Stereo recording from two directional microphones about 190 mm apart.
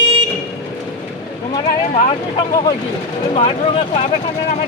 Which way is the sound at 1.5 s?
20° left (ahead or behind).